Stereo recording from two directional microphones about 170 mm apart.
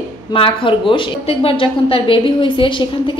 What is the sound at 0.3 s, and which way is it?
Speech, 30° left (ahead or behind).